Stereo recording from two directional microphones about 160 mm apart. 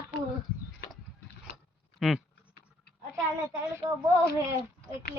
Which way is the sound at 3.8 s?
35° right (ahead or behind).